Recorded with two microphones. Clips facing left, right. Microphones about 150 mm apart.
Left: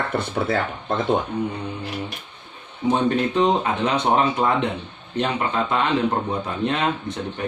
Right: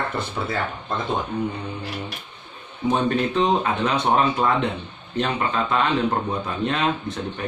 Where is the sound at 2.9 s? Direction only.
20° left (ahead or behind).